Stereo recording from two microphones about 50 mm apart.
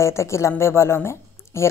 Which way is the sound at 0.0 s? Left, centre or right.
Left.